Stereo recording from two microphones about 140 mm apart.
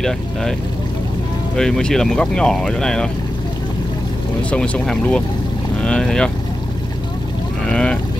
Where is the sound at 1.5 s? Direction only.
5° left (ahead or behind).